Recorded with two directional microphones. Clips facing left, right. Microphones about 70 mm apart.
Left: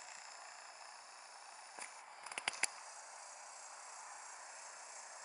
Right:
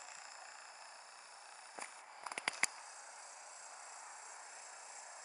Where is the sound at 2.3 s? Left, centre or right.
Right.